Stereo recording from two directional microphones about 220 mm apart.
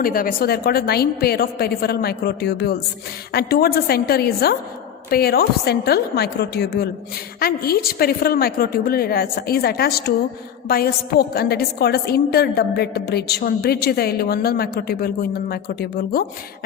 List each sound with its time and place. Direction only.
0.0 s a woman's voice: 40° left (ahead or behind)